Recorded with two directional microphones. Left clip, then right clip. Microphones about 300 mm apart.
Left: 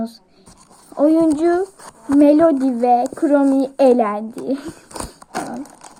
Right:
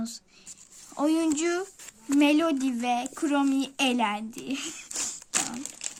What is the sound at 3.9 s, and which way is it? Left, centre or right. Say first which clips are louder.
Speech: left 12 dB; right.